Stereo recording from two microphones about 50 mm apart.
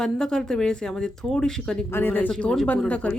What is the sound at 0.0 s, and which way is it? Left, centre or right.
Speech, centre.